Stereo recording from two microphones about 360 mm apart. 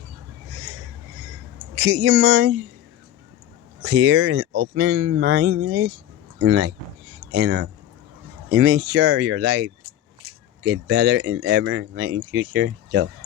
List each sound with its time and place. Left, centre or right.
1.7 s speech: right
3.8 s speech: right